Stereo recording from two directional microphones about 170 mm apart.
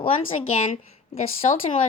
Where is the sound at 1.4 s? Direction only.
40° left (ahead or behind).